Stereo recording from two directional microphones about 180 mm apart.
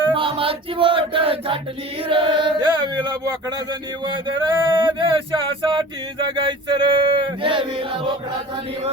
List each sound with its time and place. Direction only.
0.1 s chant: 30° right (ahead or behind)